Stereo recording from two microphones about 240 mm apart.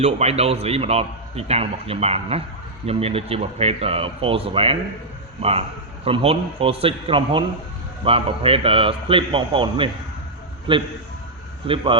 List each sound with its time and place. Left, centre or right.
0.0 s a man's voice: right